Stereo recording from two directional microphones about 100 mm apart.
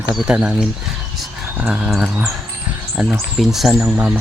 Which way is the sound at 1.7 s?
5° right (ahead or behind).